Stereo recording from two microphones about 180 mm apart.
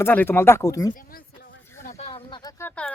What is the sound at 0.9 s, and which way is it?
Speech, 50° left (ahead or behind).